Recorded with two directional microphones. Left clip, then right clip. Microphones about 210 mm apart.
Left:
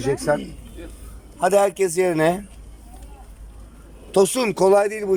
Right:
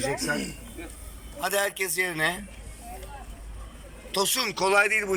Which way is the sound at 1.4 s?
60° left (ahead or behind).